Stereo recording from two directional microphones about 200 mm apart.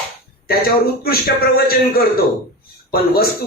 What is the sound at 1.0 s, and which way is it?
A man's voice, 50° left (ahead or behind).